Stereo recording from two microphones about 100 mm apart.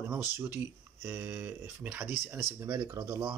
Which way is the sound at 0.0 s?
20° right (ahead or behind).